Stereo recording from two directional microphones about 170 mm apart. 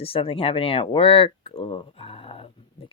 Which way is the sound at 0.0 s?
35° left (ahead or behind).